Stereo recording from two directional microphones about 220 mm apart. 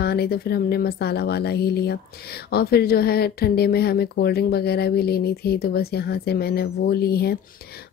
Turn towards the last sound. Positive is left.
turn(degrees=45)  # may be behind; listen again after turning